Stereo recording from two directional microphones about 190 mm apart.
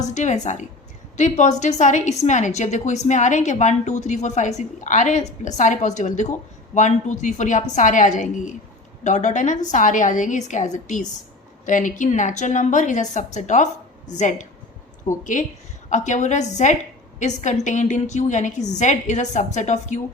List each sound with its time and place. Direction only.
0.0 s a woman's voice: 40° left (ahead or behind)
15.2 s a woman's voice: 40° left (ahead or behind)